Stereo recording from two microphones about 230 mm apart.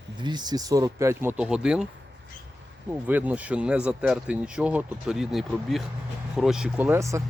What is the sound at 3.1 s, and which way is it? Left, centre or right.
Speech, centre.